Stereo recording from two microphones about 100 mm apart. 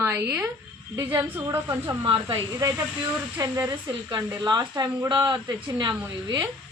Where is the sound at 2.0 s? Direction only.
60° right (ahead or behind).